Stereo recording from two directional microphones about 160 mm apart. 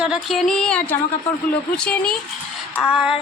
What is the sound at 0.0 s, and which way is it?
A woman's voice, centre (ahead or behind).